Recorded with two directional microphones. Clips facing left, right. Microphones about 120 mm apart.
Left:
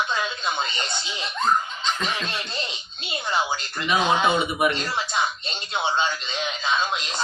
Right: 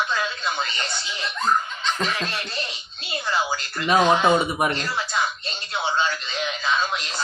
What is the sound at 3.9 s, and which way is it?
Speech, 40° right (ahead or behind).